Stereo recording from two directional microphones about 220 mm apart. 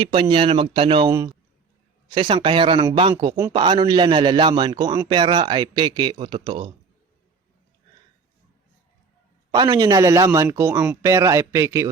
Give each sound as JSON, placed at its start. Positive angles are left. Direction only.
{"t": 0.0, "sound": "a man's voice", "side_deg": -25}
{"t": 9.6, "sound": "speech", "side_deg": -15}